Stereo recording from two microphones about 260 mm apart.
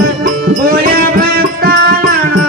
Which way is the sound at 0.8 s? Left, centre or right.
Right.